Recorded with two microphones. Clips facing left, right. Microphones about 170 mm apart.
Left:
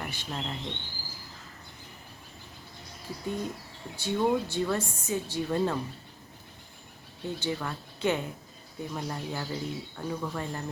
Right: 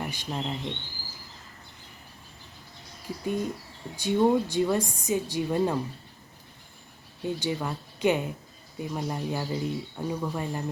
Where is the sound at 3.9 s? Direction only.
15° right (ahead or behind).